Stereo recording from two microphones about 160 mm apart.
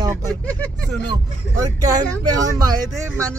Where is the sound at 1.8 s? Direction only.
25° right (ahead or behind).